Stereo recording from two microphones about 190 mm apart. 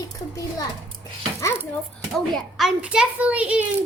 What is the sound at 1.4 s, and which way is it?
Dishes, 15° left (ahead or behind).